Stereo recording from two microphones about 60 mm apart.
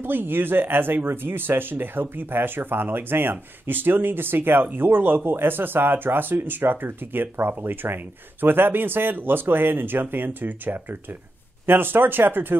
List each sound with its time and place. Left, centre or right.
0.0 s speech: right